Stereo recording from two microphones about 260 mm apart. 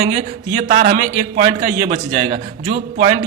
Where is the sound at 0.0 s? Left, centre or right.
Right.